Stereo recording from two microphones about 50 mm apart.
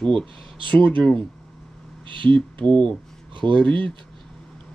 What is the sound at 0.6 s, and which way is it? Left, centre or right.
Speech, left.